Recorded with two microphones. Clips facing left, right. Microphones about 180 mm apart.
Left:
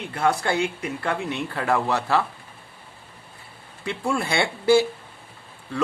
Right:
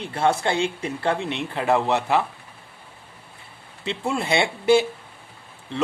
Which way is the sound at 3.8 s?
25° right (ahead or behind).